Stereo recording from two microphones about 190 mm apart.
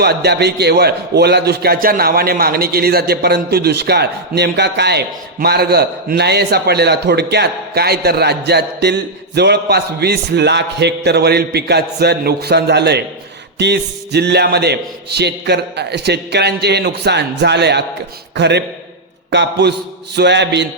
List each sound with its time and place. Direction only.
0.0 s a man's voice: 60° right (ahead or behind)